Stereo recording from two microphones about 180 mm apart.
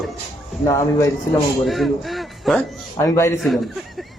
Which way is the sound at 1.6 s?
Centre (ahead or behind).